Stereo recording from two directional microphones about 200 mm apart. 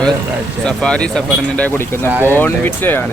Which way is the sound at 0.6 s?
5° left (ahead or behind).